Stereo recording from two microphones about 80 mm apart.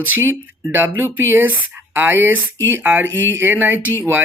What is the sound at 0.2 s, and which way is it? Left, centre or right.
Speech, right.